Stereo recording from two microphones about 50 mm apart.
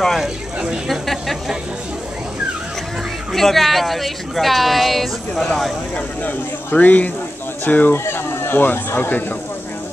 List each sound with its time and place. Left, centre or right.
0.0 s speech: centre
0.8 s a sound: centre
3.3 s speech: centre
5.9 s speech: left
7.9 s speech: left